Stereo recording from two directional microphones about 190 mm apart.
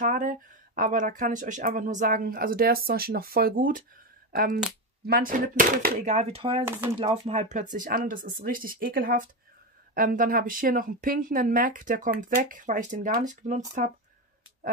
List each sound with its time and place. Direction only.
0.0 s speech: 45° right (ahead or behind)
5.0 s speech: 50° right (ahead or behind); by 6.6 s 30° right (ahead or behind)
6.6 s speech: 15° right (ahead or behind)
7.0 s speech: 35° right (ahead or behind)